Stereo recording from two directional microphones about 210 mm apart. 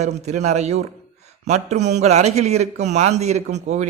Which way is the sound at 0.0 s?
30° right (ahead or behind).